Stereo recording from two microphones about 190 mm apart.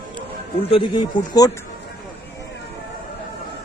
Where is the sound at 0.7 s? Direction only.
25° left (ahead or behind).